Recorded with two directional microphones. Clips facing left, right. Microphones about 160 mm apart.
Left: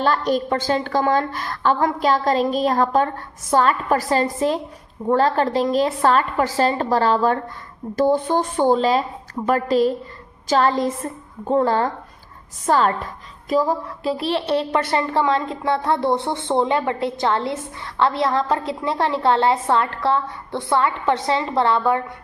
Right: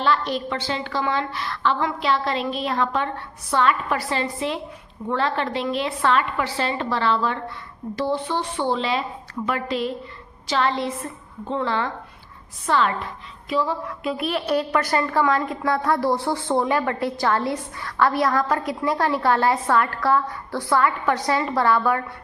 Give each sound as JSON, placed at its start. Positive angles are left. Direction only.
{"t": 0.0, "sound": "a woman's voice", "side_deg": 45}